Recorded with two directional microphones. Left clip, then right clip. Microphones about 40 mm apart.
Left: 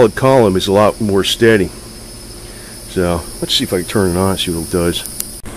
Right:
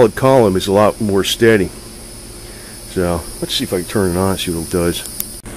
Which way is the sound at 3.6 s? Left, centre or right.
Left.